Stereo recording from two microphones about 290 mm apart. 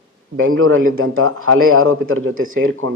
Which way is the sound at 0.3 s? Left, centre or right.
Right.